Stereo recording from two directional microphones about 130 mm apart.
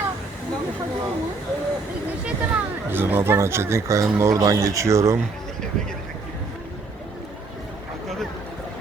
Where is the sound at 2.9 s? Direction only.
15° right (ahead or behind).